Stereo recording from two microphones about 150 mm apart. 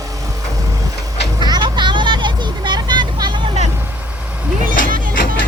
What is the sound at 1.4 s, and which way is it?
Vehicle, 30° right (ahead or behind).